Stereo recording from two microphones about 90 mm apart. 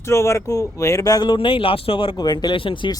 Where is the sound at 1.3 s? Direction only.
80° left.